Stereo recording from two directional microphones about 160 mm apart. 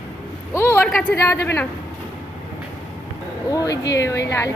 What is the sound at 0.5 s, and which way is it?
Speech, 15° left (ahead or behind).